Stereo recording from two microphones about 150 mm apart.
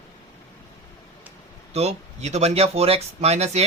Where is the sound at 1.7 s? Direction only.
45° right (ahead or behind).